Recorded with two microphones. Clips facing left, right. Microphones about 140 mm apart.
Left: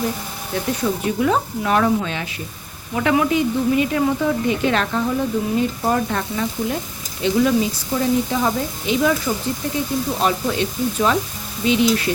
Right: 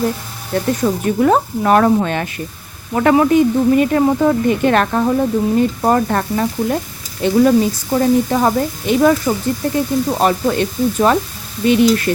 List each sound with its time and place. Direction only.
0.5 s speech: 50° right (ahead or behind)